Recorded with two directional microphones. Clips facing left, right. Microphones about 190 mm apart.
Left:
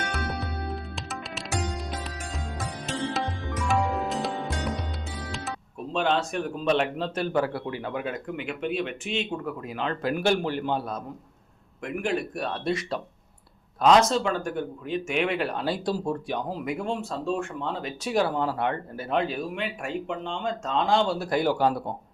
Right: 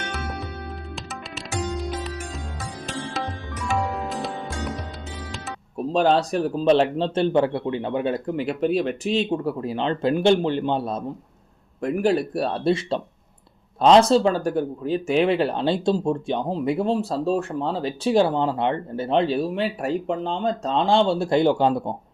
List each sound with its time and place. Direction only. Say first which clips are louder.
3.1 s music: even; centre (ahead or behind)
5.7 s speech: right 7 dB; 40° right (ahead or behind)
11.8 s speech: right 7 dB; 35° right (ahead or behind)